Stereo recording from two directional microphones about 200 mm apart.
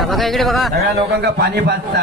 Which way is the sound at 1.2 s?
55° right (ahead or behind).